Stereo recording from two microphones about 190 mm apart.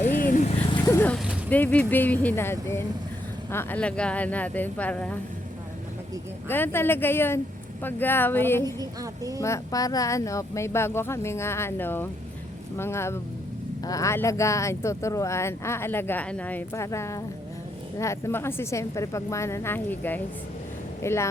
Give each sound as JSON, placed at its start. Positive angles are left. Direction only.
{"t": 0.0, "sound": "a sound", "side_deg": 45}
{"t": 0.9, "sound": "speech", "side_deg": 10}
{"t": 6.5, "sound": "speech", "side_deg": 10}
{"t": 8.6, "sound": "a woman's voice", "side_deg": -20}
{"t": 9.4, "sound": "speech", "side_deg": 15}